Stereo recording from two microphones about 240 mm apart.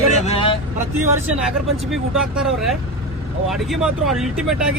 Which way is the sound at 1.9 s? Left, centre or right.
Centre.